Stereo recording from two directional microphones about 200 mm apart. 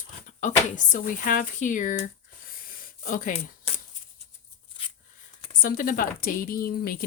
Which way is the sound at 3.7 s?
30° left (ahead or behind).